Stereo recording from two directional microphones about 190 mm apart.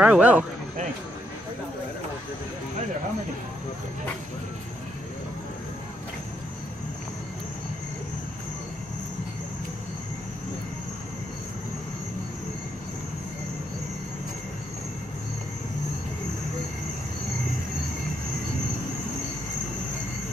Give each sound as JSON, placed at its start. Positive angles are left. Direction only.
{"t": 0.0, "sound": "speech", "side_deg": -5}